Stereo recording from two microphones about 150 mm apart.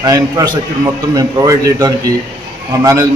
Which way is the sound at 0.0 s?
25° right (ahead or behind).